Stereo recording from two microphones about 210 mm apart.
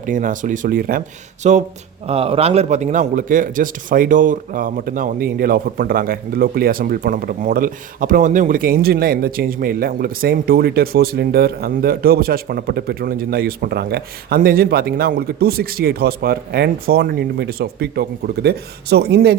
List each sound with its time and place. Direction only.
0.0 s a man's voice: 40° right (ahead or behind)